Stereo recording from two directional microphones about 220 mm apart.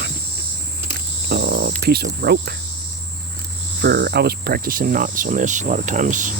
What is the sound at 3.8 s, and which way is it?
Speech, 50° right (ahead or behind).